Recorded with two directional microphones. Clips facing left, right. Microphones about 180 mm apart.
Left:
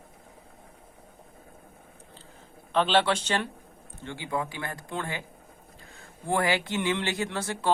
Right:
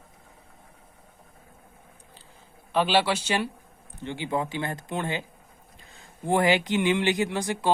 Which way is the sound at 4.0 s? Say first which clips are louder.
Right 3 dB; 20° right (ahead or behind).